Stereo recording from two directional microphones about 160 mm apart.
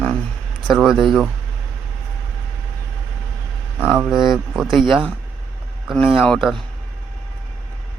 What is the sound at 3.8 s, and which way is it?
Speech, 5° right (ahead or behind).